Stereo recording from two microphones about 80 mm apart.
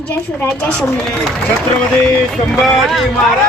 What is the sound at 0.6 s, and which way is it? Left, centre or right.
Speech, centre.